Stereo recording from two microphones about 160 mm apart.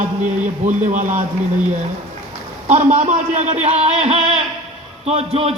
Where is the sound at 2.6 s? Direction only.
45° right (ahead or behind).